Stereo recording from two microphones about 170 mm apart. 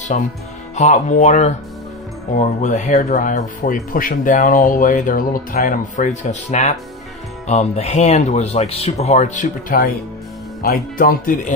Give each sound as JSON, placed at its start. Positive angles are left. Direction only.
{"t": 0.1, "sound": "speech", "side_deg": 40}